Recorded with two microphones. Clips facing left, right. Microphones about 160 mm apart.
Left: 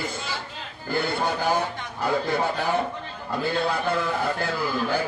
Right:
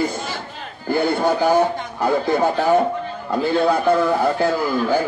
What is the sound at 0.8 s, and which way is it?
A man's voice, 45° right (ahead or behind).